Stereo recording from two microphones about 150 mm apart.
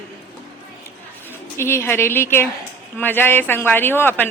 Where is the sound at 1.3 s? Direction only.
15° left (ahead or behind).